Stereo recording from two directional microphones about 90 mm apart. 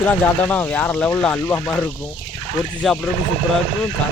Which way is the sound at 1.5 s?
25° left (ahead or behind).